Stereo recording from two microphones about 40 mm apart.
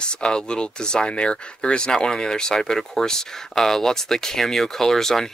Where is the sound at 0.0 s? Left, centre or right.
Left.